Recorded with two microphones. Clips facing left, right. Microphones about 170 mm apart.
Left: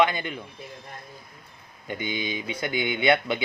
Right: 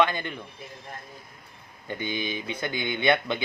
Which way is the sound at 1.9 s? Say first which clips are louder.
Even; 15° left (ahead or behind).